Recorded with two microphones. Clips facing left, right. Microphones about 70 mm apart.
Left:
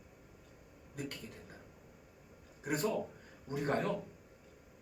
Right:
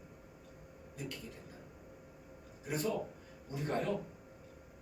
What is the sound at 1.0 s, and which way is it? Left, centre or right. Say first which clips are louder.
Speech: left 2 dB; left.